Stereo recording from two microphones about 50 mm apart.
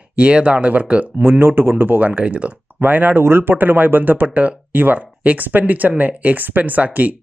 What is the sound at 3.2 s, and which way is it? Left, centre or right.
Speech, right.